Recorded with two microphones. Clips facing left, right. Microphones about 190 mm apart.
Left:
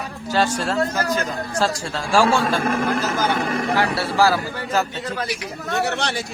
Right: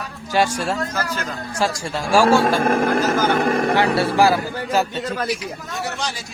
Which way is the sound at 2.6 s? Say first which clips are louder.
Right 3 dB; 50° right (ahead or behind).